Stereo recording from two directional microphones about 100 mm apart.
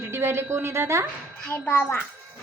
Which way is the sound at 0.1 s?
25° right (ahead or behind).